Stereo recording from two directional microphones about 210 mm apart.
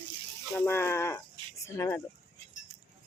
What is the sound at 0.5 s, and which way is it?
Speech, 10° left (ahead or behind).